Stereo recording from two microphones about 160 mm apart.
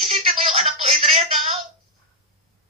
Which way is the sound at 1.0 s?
35° right (ahead or behind).